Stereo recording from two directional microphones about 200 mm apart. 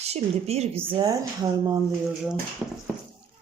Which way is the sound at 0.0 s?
30° right (ahead or behind).